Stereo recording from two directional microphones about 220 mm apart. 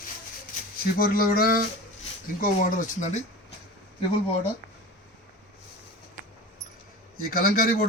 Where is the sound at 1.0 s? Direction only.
40° left (ahead or behind).